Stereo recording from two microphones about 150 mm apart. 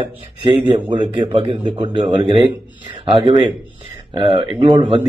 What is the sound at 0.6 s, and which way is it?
A man's voice, 30° right (ahead or behind).